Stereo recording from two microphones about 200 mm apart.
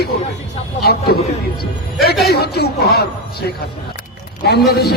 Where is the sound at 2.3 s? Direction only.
55° left (ahead or behind).